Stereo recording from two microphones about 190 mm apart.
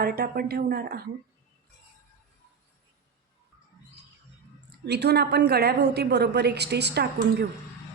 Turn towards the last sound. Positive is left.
turn(degrees=-60)  # may be behind; listen again after turning